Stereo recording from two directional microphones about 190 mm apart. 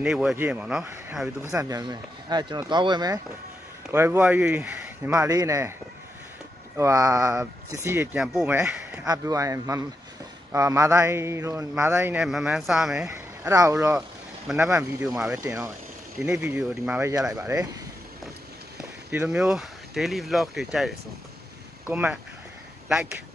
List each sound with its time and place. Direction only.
0.0 s speech: 5° right (ahead or behind)
1.5 s speech: 20° right (ahead or behind)
5.1 s speech: 20° right (ahead or behind)
6.8 s speech: 20° right (ahead or behind)
9.0 s speech: 20° right (ahead or behind); by 13.1 s 5° right (ahead or behind)
13.5 s speech: 20° right (ahead or behind)
14.8 s speech: 5° right (ahead or behind)
15.4 s speech: 15° right (ahead or behind)
16.3 s speech: 5° right (ahead or behind)
18.8 s speech: 5° right (ahead or behind)